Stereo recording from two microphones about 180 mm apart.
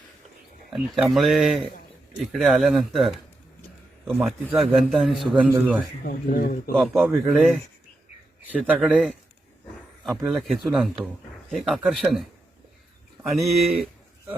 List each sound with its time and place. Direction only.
0.7 s a man's voice: centre (ahead or behind)
6.1 s speech: 55° left (ahead or behind)
6.7 s a man's voice: centre (ahead or behind)
10.2 s a man's voice: centre (ahead or behind)
13.3 s a man's voice: centre (ahead or behind)